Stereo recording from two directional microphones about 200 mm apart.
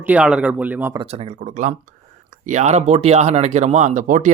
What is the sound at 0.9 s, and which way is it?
Speech, 30° right (ahead or behind).